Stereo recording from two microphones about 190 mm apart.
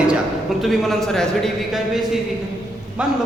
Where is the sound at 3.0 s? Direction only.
5° right (ahead or behind).